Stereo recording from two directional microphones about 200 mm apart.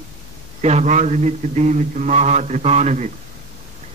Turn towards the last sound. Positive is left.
turn(degrees=-35)  # may be behind; listen again after turning